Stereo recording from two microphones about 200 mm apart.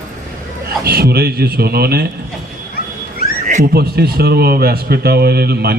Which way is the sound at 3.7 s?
50° right (ahead or behind).